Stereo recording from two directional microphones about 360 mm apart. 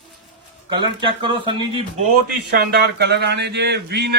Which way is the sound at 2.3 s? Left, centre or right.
Right.